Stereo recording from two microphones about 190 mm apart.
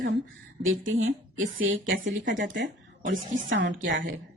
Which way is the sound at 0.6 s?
90° right.